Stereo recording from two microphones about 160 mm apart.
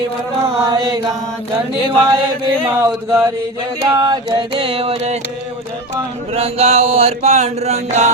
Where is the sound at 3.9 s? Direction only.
25° right (ahead or behind).